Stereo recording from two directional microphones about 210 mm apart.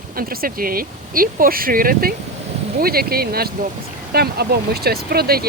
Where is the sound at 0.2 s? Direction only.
45° right (ahead or behind).